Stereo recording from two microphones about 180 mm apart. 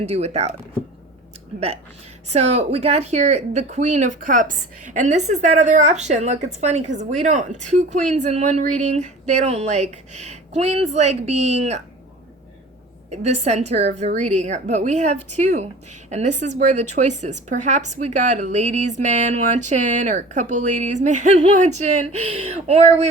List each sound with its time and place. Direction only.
0.0 s a woman's voice: 35° right (ahead or behind)
2.3 s a woman's voice: 35° right (ahead or behind)
13.1 s a woman's voice: 40° right (ahead or behind)